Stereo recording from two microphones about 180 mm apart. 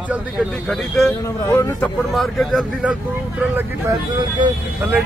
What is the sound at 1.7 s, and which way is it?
Speech, 5° left (ahead or behind).